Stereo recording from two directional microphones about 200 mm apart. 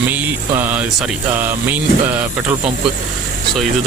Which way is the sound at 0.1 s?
10° right (ahead or behind).